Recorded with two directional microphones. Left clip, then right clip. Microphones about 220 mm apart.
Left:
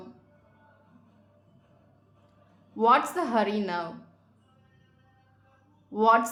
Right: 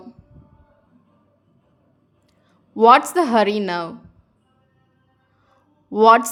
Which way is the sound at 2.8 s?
45° right (ahead or behind).